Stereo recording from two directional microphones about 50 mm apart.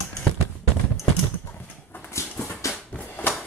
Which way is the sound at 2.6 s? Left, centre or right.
Left.